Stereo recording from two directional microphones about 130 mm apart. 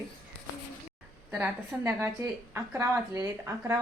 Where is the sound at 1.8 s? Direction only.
20° right (ahead or behind).